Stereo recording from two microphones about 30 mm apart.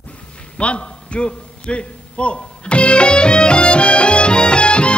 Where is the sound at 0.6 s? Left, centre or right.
Left.